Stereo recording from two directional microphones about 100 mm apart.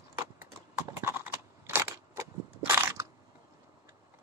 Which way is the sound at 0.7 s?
25° right (ahead or behind).